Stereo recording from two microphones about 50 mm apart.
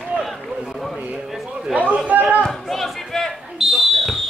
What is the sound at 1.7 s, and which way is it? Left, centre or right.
Chatter, right.